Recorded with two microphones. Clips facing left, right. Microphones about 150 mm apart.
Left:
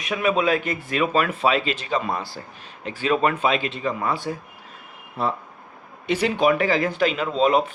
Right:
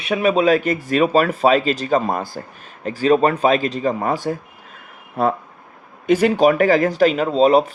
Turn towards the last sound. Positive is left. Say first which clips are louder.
# right 5 dB
turn(degrees=-40)  # may be behind; listen again after turning